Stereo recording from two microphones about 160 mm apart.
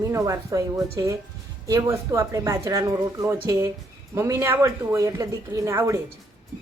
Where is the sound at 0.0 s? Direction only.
20° right (ahead or behind).